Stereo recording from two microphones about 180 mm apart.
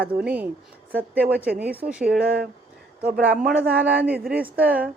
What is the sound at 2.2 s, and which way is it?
Speech, 60° right (ahead or behind).